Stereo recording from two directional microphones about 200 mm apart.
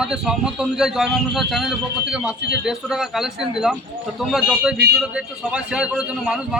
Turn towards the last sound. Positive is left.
turn(degrees=-5)  # may be behind; listen again after turning